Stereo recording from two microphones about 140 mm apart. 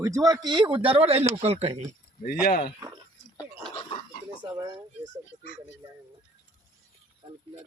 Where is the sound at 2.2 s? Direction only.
90° left.